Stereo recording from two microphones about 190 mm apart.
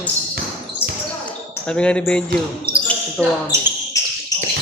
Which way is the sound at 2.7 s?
25° right (ahead or behind).